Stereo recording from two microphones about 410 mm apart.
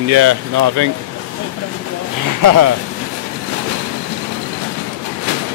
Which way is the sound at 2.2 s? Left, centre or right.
Right.